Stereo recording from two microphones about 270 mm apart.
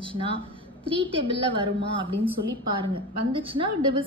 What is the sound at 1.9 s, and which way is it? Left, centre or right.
Speech, centre.